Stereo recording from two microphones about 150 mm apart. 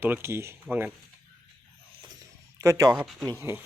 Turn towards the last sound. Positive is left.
turn(degrees=0)  # may be behind; listen again after turning